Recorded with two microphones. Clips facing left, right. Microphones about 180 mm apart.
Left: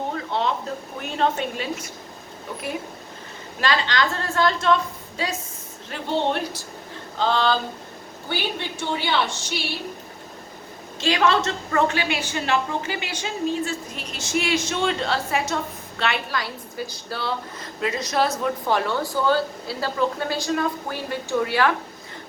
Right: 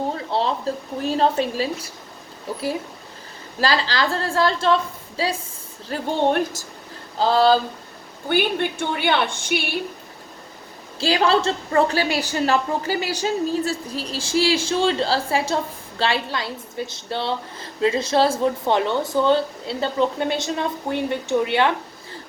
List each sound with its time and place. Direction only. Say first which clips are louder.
0.1 s a woman's voice: right 2 dB; 30° right (ahead or behind)
3.6 s a woman's voice: right 2 dB; 35° right (ahead or behind)
5.9 s a woman's voice: right 3 dB; 45° right (ahead or behind)
8.3 s a woman's voice: right 7 dB; 50° right (ahead or behind)
11.0 s a woman's voice: right 2 dB; 35° right (ahead or behind)